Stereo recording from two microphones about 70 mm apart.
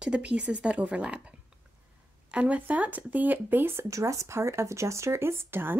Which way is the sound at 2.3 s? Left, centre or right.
Centre.